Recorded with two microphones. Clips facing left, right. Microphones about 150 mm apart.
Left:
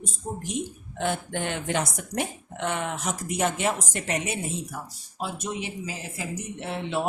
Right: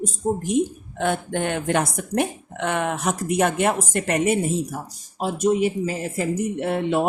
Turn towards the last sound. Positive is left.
turn(degrees=-55)  # may be behind; listen again after turning